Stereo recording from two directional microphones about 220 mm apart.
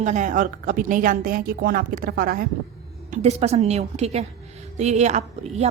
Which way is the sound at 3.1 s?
30° right (ahead or behind).